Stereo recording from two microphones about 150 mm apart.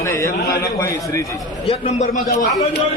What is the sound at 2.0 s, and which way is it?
Speech, 60° left (ahead or behind).